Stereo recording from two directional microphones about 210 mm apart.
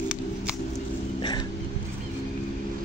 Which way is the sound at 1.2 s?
20° left (ahead or behind).